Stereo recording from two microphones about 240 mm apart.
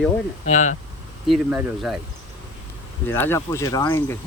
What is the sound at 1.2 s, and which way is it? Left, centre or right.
Speech, centre.